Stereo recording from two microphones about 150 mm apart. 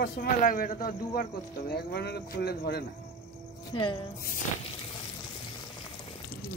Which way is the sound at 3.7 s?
30° left (ahead or behind).